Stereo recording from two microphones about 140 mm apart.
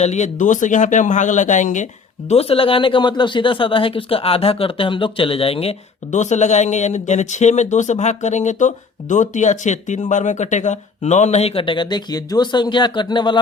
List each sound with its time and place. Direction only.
0.0 s speech: 55° left (ahead or behind); by 13.4 s 35° left (ahead or behind)